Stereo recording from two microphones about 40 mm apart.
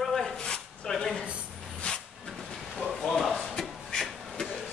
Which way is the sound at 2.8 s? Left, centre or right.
Centre.